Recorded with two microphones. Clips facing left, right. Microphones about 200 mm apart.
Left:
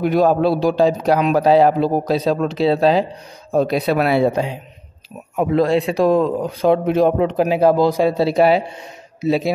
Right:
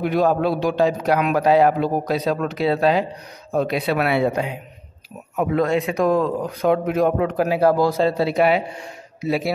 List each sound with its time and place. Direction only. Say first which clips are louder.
0.0 s a man's voice: left 4 dB; 40° left (ahead or behind); by 9.5 s 25° left (ahead or behind)